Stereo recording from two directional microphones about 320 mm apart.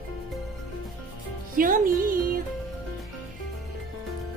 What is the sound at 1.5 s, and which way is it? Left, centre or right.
Speech, right.